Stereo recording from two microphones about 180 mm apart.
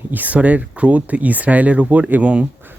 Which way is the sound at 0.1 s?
10° right (ahead or behind).